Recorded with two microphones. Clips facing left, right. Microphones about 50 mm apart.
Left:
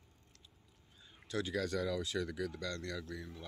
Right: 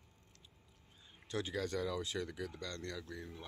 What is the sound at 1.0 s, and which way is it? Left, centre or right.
Speech, right.